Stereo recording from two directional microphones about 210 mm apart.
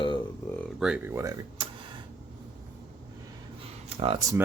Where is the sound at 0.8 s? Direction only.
5° right (ahead or behind).